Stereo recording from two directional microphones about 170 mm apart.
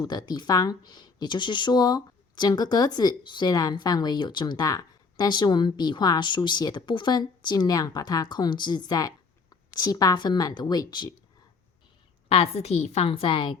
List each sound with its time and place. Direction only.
0.0 s speech: 25° left (ahead or behind)
12.3 s a woman's voice: 35° left (ahead or behind)